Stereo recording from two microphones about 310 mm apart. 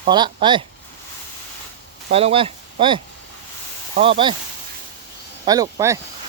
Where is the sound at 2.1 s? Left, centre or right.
Centre.